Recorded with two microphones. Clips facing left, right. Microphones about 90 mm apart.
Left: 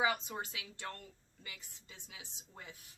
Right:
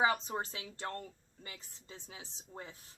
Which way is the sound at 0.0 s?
35° right (ahead or behind).